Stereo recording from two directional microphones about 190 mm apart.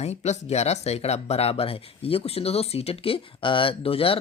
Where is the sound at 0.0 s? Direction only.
35° left (ahead or behind).